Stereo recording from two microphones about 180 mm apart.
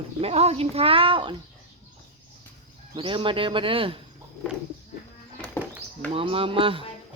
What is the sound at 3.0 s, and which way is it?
Speech, 30° right (ahead or behind).